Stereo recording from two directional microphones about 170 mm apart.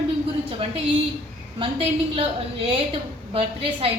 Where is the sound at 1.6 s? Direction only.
35° right (ahead or behind).